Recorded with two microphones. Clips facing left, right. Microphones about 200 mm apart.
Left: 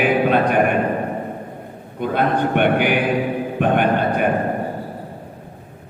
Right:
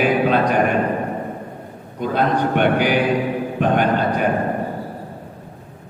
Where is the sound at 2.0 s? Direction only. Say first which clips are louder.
Even; 55° left (ahead or behind).